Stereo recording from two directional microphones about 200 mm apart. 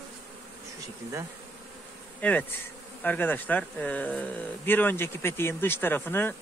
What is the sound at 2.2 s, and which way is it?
Speech, 5° left (ahead or behind).